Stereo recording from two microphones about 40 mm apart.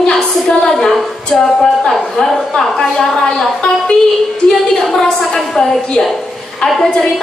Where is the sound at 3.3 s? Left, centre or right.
Centre.